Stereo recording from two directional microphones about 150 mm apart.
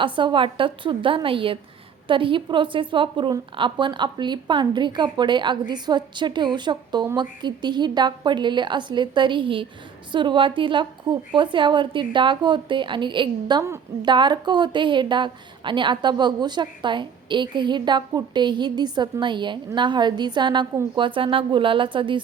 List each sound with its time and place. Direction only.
0.0 s a woman's voice: 35° right (ahead or behind)